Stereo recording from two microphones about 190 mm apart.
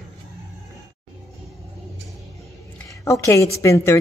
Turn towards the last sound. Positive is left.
turn(degrees=15)  # may be behind; listen again after turning